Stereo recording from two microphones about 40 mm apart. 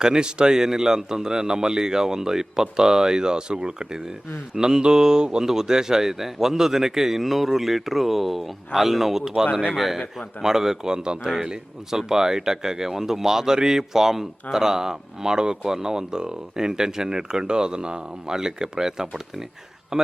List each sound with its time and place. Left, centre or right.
0.0 s a man's voice: centre
10.4 s speech: centre
19.9 s speech: right